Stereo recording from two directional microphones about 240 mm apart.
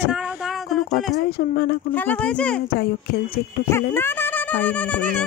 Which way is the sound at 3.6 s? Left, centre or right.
Centre.